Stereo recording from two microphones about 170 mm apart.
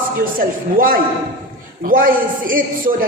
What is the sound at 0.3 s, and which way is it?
A man's voice, 55° right (ahead or behind).